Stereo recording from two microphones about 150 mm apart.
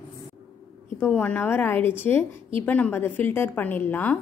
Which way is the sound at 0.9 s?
10° left (ahead or behind).